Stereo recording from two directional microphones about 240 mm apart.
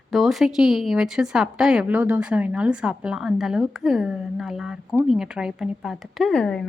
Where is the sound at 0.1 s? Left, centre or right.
Centre.